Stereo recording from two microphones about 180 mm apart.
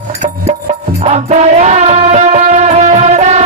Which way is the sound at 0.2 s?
35° right (ahead or behind).